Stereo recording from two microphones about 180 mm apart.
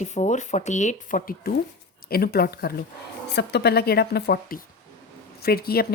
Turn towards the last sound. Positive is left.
turn(degrees=60)  # may be behind; listen again after turning